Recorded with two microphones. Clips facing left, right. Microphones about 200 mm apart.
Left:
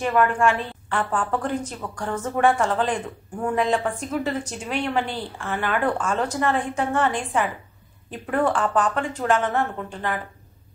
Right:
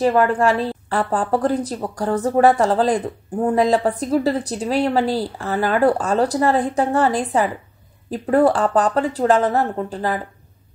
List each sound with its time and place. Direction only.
0.0 s speech: 35° right (ahead or behind)